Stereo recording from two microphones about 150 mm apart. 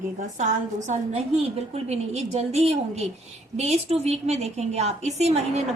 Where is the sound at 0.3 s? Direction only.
55° right (ahead or behind).